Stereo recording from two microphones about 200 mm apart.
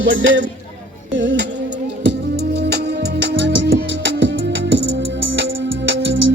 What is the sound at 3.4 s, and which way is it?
Music, 65° right (ahead or behind).